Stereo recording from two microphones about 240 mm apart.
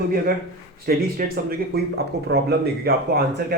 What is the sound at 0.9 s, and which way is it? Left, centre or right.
Speech, right.